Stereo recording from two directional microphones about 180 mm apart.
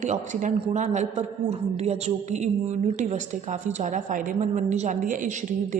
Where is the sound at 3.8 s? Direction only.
45° right (ahead or behind).